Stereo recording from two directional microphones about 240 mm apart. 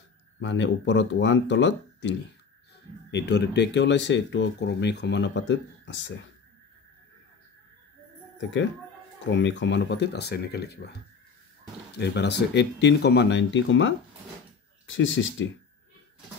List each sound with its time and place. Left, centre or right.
0.4 s speech: left
9.3 s speech: left
12.0 s speech: left